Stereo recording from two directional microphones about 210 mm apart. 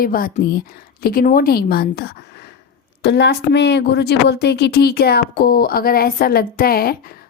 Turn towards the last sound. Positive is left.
turn(degrees=45)  # may be behind; listen again after turning